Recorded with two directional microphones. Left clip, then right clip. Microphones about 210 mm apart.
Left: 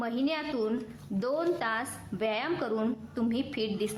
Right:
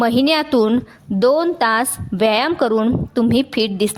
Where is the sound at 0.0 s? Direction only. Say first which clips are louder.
Right 16 dB; 50° right (ahead or behind).